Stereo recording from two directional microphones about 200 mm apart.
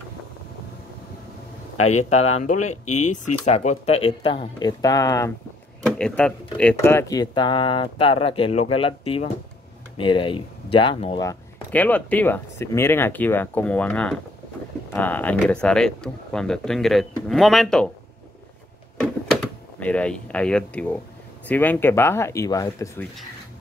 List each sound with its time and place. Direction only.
1.8 s speech: 90° left
3.0 s speech: 35° left (ahead or behind); by 5.3 s 15° left (ahead or behind)
5.9 s speech: 5° left (ahead or behind); by 11.2 s 25° left (ahead or behind)
11.2 s speech: 5° left (ahead or behind)
19.8 s speech: 5° left (ahead or behind)